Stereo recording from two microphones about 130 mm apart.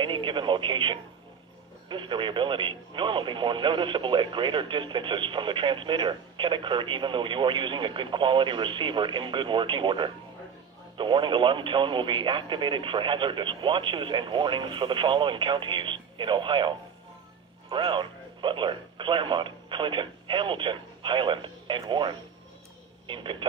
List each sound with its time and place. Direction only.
0.0 s speech: 40° right (ahead or behind)